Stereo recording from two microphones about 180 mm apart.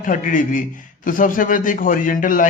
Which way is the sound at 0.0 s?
45° left (ahead or behind).